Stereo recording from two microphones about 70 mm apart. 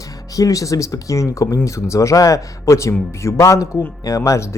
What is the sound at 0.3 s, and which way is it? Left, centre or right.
Speech, left.